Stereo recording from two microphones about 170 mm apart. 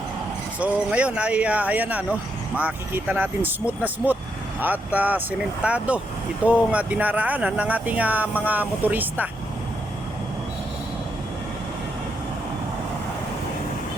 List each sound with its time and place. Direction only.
0.6 s speech: 5° right (ahead or behind)